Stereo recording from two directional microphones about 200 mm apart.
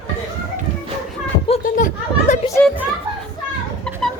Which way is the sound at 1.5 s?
40° left (ahead or behind).